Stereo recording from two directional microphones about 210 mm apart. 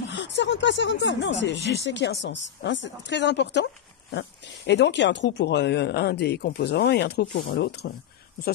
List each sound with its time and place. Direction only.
0.1 s a woman's voice: 60° left (ahead or behind)